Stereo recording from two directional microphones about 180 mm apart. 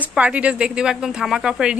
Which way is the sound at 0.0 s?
5° right (ahead or behind).